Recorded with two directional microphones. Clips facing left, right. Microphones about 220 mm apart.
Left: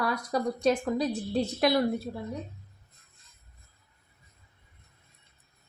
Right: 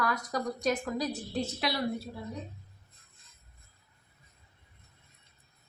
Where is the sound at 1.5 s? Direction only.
50° left (ahead or behind).